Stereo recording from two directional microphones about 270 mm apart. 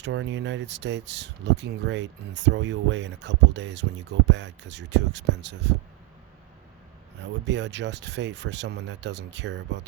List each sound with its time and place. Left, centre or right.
0.0 s speech: right
7.2 s speech: right